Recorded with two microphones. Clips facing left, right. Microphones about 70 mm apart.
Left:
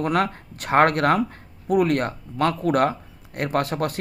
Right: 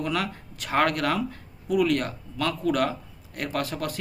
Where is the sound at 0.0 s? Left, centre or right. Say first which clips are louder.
Left 6 dB; left.